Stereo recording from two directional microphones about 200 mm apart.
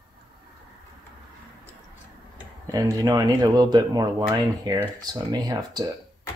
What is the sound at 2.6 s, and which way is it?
Speech, 15° right (ahead or behind).